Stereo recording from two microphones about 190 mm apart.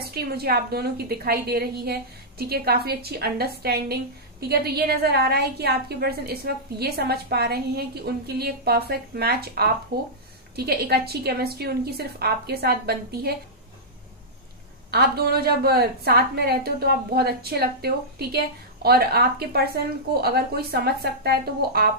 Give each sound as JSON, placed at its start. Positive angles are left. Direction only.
{"t": 0.0, "sound": "a woman's voice", "side_deg": -55}
{"t": 14.9, "sound": "a woman's voice", "side_deg": -55}